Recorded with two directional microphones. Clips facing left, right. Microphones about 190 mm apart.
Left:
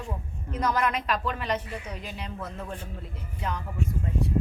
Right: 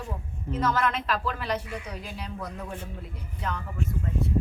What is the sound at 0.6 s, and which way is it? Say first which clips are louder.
Speech: even; 15° left (ahead or behind).